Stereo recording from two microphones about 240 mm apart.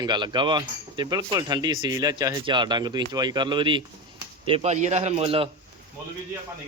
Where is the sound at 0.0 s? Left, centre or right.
Centre.